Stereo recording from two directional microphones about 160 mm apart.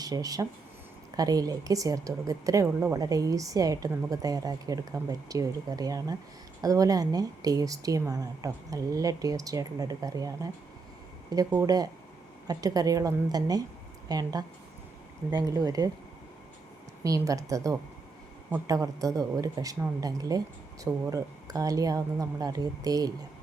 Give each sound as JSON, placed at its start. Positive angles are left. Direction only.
{"t": 0.0, "sound": "speech", "side_deg": -20}
{"t": 17.0, "sound": "speech", "side_deg": -20}